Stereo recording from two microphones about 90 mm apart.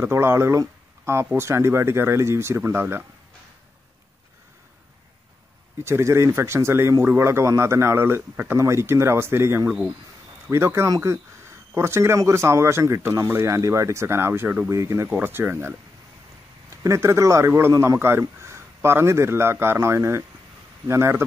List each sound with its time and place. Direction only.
0.0 s a man's voice: 30° right (ahead or behind)
5.9 s a man's voice: 30° right (ahead or behind)
14.7 s speech: 35° right (ahead or behind)
15.0 s a man's voice: 20° right (ahead or behind)
16.8 s a man's voice: 35° right (ahead or behind)